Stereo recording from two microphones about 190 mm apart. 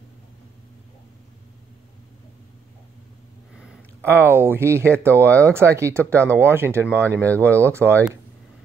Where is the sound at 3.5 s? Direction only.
10° right (ahead or behind).